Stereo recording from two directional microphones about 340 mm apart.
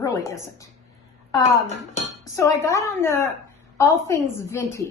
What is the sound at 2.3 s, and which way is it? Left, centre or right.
A woman's voice, centre.